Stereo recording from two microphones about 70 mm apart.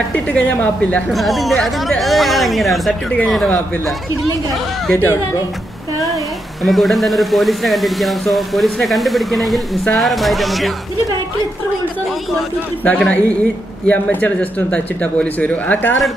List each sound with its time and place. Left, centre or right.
0.1 s speech: left
1.1 s speech: centre
6.6 s speech: centre
12.8 s speech: left